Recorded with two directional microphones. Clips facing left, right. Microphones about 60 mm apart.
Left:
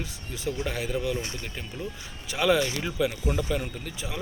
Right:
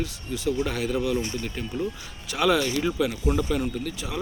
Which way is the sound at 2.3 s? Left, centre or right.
Centre.